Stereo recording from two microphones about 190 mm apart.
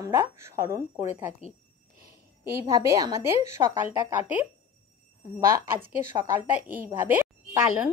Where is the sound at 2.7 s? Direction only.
15° right (ahead or behind).